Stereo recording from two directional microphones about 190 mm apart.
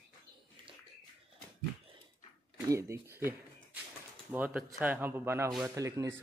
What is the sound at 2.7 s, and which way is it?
Speech, 15° right (ahead or behind).